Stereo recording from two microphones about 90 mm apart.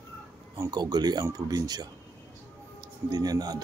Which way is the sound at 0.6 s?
45° right (ahead or behind).